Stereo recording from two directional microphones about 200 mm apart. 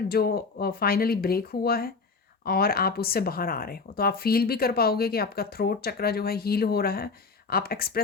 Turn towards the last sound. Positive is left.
turn(degrees=50)  # may be behind; listen again after turning